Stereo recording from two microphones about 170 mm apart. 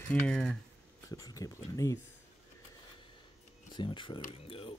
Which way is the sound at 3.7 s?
30° left (ahead or behind).